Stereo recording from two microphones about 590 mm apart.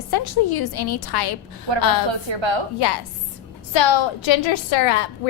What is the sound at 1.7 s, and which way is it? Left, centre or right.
Speech, right.